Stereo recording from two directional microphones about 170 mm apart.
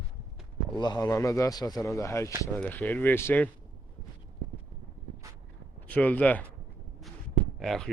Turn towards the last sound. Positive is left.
turn(degrees=0)  # may be behind; listen again after turning